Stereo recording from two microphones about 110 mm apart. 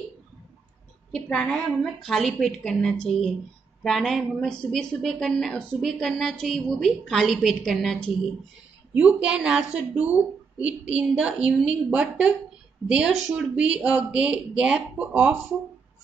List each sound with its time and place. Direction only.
1.1 s a woman's voice: 5° left (ahead or behind)
8.9 s speech: 10° right (ahead or behind)